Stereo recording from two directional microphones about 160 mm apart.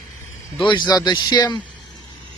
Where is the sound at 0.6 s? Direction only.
30° left (ahead or behind).